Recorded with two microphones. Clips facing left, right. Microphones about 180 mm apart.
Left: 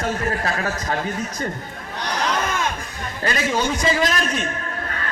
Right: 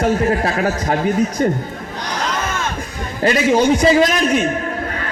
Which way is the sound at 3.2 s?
30° right (ahead or behind).